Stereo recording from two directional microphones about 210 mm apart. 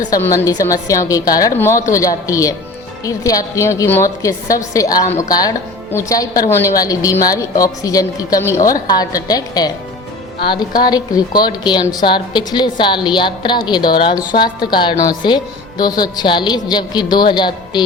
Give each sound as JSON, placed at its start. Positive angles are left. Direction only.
{"t": 0.1, "sound": "a woman's voice", "side_deg": 15}